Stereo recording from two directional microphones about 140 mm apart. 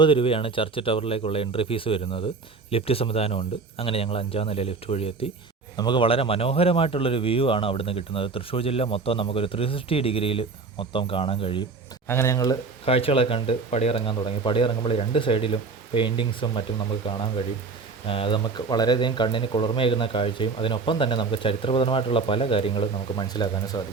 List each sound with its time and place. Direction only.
0.0 s speech: 40° left (ahead or behind)
5.7 s speech: 35° left (ahead or behind)
12.0 s speech: 20° left (ahead or behind)
12.8 s speech: 45° left (ahead or behind); by 23.8 s 30° left (ahead or behind)